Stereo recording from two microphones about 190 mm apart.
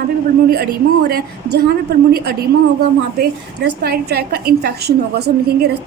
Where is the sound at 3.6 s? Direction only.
55° right (ahead or behind).